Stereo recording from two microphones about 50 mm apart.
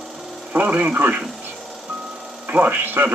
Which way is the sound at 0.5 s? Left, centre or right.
Right.